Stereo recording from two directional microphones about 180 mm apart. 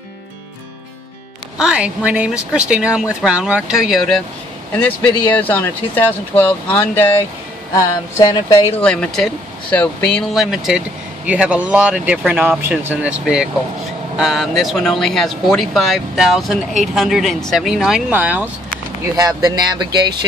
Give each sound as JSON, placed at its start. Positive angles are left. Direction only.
{"t": 1.6, "sound": "speech", "side_deg": -5}
{"t": 5.2, "sound": "speech", "side_deg": 10}
{"t": 8.7, "sound": "speech", "side_deg": 5}
{"t": 19.1, "sound": "speech", "side_deg": -20}